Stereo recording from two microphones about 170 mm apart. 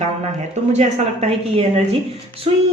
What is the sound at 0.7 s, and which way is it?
A woman's voice, 40° right (ahead or behind).